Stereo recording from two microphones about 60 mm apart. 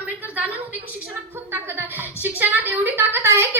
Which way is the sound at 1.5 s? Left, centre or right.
Right.